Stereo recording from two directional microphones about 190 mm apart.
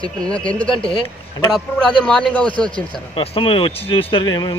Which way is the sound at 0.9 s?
25° left (ahead or behind).